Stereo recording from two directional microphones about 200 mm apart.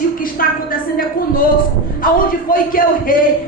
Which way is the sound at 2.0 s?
45° left (ahead or behind).